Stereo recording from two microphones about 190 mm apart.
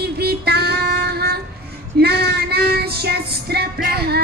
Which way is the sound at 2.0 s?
55° right (ahead or behind).